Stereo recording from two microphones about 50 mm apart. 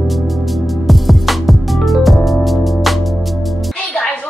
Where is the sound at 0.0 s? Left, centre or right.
Centre.